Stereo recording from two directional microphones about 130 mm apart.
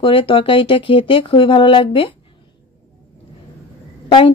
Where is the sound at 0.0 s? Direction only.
40° left (ahead or behind).